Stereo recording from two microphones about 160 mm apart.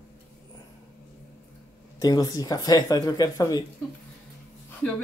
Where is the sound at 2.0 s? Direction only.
25° left (ahead or behind).